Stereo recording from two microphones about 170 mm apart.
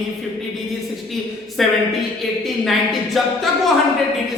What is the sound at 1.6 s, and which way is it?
A man's voice, centre (ahead or behind).